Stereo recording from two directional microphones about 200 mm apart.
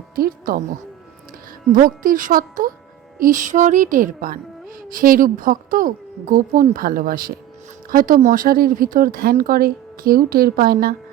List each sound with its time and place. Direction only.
0.2 s speech: 45° right (ahead or behind)
1.7 s speech: 40° right (ahead or behind)